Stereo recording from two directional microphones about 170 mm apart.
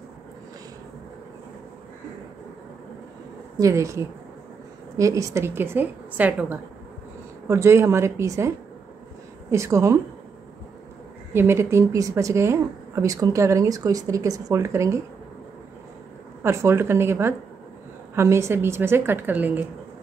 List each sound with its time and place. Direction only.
3.5 s speech: 20° right (ahead or behind)
11.3 s speech: 15° right (ahead or behind)
16.4 s speech: 15° right (ahead or behind)